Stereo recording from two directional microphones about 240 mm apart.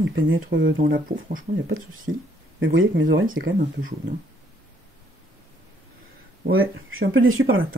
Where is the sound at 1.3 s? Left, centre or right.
Right.